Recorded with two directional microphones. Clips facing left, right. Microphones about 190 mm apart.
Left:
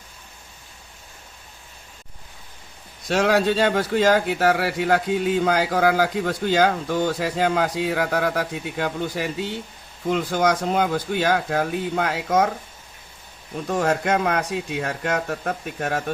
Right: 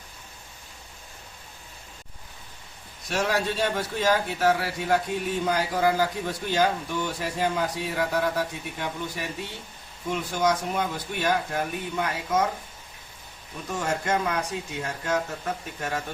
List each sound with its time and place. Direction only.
3.1 s a man's voice: 80° left
13.7 s speech: 65° left (ahead or behind)